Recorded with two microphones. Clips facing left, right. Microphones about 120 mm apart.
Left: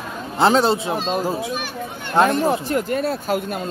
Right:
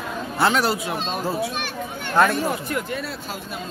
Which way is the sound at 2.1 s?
20° left (ahead or behind).